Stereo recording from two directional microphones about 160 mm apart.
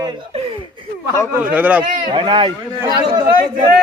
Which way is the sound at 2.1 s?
30° right (ahead or behind).